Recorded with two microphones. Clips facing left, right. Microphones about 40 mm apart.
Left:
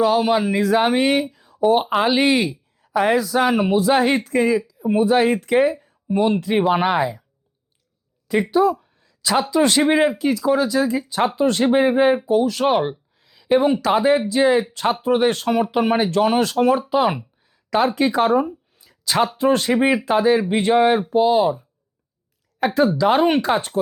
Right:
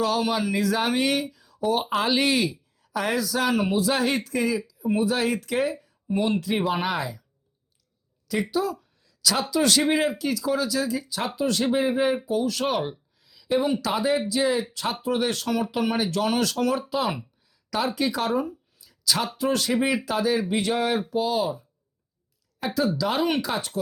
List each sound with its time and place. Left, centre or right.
0.0 s speech: centre
8.3 s speech: left
17.5 s a sound: left
19.4 s speech: left
22.6 s speech: left